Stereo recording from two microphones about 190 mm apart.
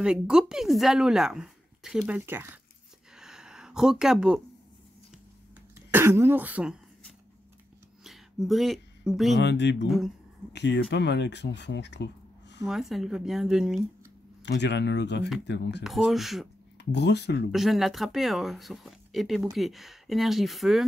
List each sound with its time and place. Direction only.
0.0 s speech: 5° right (ahead or behind)
3.2 s a sound: 5° right (ahead or behind)
5.8 s throat clearing: 10° right (ahead or behind)
8.0 s a sound: centre (ahead or behind)
9.3 s speech: 65° left (ahead or behind)
9.8 s speech: centre (ahead or behind)
10.5 s speech: 65° left (ahead or behind)
12.6 s speech: centre (ahead or behind)
14.4 s speech: 65° left (ahead or behind)
15.8 s speech: centre (ahead or behind)
16.7 s speech: 65° left (ahead or behind)
17.5 s speech: centre (ahead or behind)